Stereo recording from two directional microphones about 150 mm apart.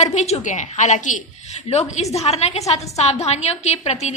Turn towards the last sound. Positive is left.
turn(degrees=45)  # may be behind; listen again after turning